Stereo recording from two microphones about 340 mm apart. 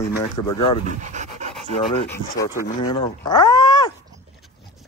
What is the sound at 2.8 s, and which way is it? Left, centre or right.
Speech, centre.